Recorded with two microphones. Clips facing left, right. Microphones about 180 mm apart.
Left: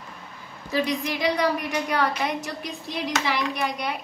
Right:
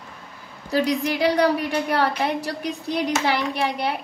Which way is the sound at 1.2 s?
35° right (ahead or behind).